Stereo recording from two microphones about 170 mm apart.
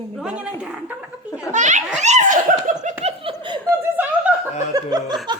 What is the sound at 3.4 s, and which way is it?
Chuckle, 25° right (ahead or behind).